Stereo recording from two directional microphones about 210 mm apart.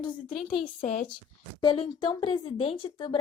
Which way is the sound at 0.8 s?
35° left (ahead or behind).